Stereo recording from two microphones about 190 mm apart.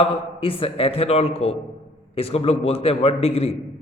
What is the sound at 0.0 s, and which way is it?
A man's voice, 30° left (ahead or behind).